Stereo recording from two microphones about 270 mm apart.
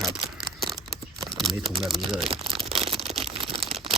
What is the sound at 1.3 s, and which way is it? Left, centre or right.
Speech, centre.